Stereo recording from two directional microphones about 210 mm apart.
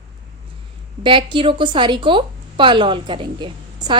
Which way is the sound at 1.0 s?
25° right (ahead or behind).